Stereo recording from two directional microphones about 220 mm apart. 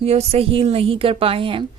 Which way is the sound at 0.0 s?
30° right (ahead or behind).